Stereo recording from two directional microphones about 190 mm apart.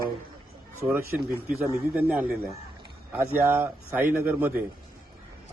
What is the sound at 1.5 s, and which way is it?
A man's voice, 10° right (ahead or behind).